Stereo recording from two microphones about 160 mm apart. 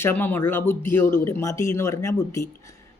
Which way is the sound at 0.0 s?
10° left (ahead or behind).